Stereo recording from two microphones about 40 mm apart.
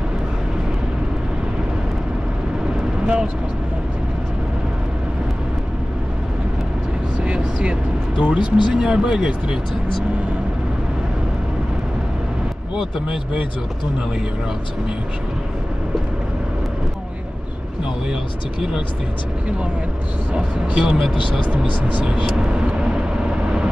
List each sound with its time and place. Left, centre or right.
7.2 s vehicle: right
8.2 s speech: right
12.7 s speech: centre
20.3 s speech: right
22.0 s speech: centre